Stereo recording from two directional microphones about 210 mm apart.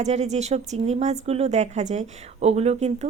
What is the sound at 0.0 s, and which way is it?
A woman's voice, 30° right (ahead or behind).